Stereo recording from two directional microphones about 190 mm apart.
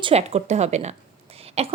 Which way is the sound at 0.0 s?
35° right (ahead or behind).